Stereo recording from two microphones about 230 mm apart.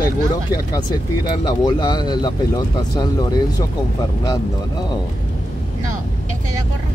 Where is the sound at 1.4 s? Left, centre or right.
Centre.